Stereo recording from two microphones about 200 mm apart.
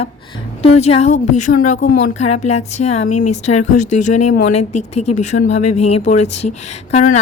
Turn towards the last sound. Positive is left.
turn(degrees=40)  # may be behind; listen again after turning